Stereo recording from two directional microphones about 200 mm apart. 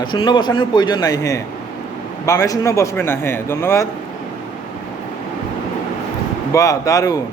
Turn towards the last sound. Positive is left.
turn(degrees=15)  # may be behind; listen again after turning